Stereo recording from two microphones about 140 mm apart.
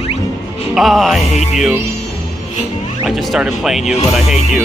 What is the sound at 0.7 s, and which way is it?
Speech, centre (ahead or behind).